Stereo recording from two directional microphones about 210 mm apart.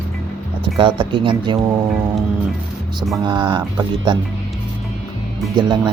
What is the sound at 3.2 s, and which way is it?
Speech, 20° right (ahead or behind).